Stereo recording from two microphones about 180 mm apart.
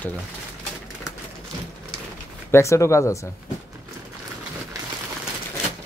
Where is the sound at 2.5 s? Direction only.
15° left (ahead or behind).